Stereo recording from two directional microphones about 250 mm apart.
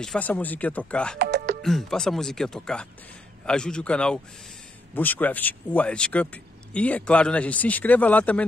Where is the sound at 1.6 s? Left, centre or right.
Centre.